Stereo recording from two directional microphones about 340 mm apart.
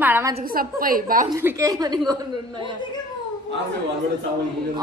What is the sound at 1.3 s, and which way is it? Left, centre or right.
A woman's voice, centre.